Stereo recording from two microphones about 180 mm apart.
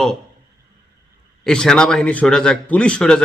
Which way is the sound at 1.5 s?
5° left (ahead or behind).